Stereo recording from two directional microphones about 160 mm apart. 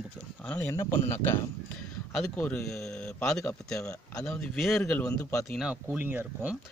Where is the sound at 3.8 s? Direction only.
20° left (ahead or behind).